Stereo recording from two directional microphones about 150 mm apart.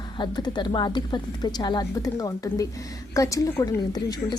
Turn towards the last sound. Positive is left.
turn(degrees=25)  # may be behind; listen again after turning